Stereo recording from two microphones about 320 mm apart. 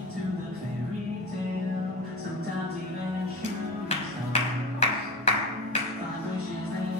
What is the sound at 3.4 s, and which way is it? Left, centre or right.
Music, left.